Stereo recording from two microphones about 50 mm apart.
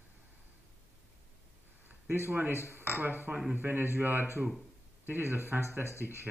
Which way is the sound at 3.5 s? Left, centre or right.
Right.